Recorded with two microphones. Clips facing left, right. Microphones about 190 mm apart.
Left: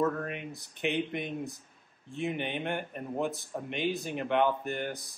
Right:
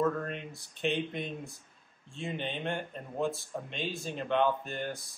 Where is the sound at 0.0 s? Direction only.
15° left (ahead or behind).